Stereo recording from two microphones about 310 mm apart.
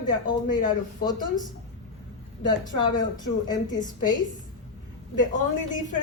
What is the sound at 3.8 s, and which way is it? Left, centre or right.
Speech, left.